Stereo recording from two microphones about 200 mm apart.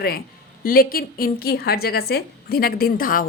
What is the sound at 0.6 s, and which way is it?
A woman's voice, 45° left (ahead or behind).